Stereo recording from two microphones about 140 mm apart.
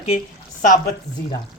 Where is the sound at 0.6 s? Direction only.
65° left (ahead or behind).